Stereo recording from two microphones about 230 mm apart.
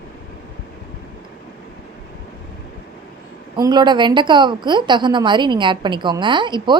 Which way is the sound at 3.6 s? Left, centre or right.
Centre.